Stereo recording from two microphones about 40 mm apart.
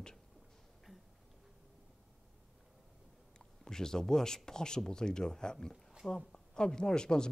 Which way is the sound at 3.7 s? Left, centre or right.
Centre.